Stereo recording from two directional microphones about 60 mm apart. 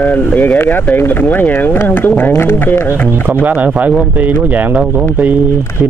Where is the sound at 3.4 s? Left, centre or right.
Right.